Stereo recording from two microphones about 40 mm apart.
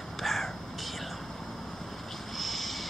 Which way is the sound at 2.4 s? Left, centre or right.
Centre.